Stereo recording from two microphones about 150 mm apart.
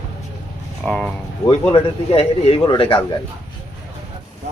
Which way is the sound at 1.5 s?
40° left (ahead or behind).